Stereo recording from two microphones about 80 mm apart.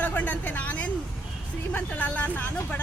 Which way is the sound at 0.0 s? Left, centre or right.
Centre.